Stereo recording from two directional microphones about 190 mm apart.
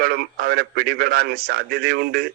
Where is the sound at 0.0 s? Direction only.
55° right (ahead or behind).